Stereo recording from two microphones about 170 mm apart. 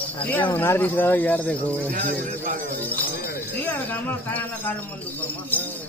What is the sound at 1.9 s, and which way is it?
Speech, 50° right (ahead or behind).